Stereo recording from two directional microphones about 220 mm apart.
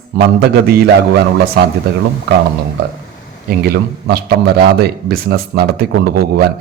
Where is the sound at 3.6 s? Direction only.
45° right (ahead or behind).